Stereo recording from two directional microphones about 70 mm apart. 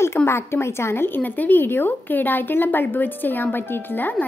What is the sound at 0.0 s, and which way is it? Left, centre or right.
A woman's voice, left.